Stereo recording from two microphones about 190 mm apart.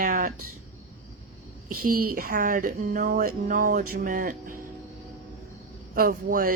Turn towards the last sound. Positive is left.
turn(degrees=-45)  # may be behind; listen again after turning